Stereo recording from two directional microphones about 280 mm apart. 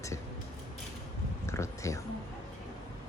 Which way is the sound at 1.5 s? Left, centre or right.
Centre.